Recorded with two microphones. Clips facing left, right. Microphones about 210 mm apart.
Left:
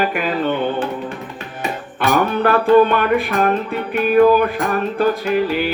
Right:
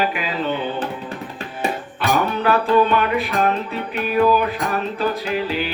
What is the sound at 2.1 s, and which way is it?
Music, 50° left (ahead or behind).